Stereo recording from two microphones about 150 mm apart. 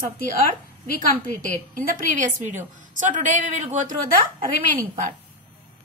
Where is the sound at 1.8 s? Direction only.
65° right (ahead or behind).